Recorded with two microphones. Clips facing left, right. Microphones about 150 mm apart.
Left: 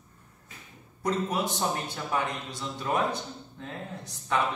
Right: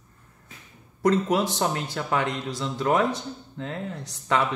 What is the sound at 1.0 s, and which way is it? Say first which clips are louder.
A man's voice: right 7 dB; 90° right.